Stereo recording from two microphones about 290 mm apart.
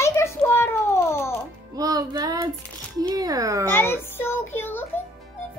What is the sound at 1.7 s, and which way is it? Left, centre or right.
Music, centre.